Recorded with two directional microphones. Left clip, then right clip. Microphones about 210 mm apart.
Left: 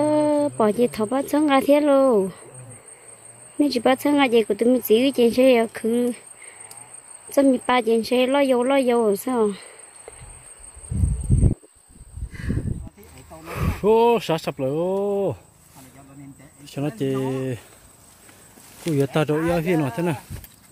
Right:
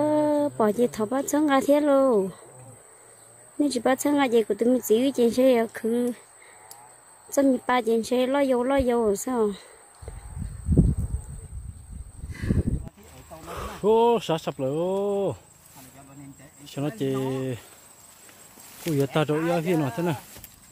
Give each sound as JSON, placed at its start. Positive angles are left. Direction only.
{"t": 0.0, "sound": "a sound", "side_deg": 0}
{"t": 1.3, "sound": "speech", "side_deg": -5}
{"t": 3.5, "sound": "speech", "side_deg": 0}
{"t": 7.3, "sound": "speech", "side_deg": -5}
{"t": 12.3, "sound": "a sound", "side_deg": 50}
{"t": 13.5, "sound": "speech", "side_deg": 0}
{"t": 16.6, "sound": "speech", "side_deg": 0}
{"t": 18.9, "sound": "speech", "side_deg": 0}